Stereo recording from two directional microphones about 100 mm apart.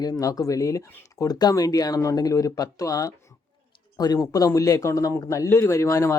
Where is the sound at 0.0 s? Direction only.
35° left (ahead or behind).